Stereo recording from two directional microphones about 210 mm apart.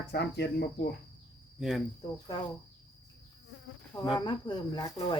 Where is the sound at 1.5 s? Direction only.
Centre (ahead or behind).